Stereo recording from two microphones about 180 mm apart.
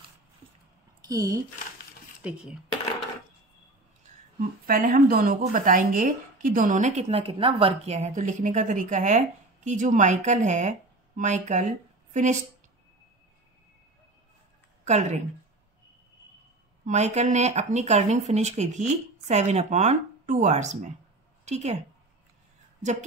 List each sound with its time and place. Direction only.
1.0 s speech: 20° right (ahead or behind)
2.2 s speech: 5° right (ahead or behind)
4.6 s a woman's voice: 50° right (ahead or behind)
14.9 s speech: 40° right (ahead or behind)
16.8 s a woman's voice: 40° right (ahead or behind)